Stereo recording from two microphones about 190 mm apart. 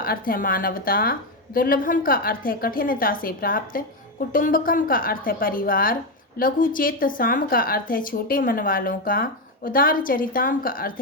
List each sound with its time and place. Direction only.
0.0 s a woman's voice: 50° left (ahead or behind)